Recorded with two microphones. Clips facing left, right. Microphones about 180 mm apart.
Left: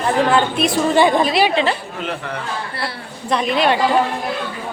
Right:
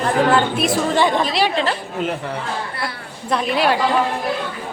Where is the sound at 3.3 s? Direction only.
5° right (ahead or behind).